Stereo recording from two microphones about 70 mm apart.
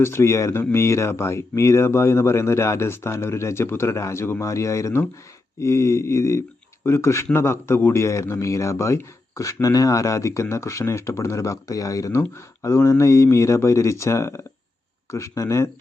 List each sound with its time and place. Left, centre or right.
0.0 s a man's voice: left
12.2 s a man's voice: left